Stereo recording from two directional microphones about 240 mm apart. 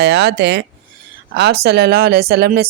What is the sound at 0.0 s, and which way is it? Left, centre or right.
A woman's voice, right.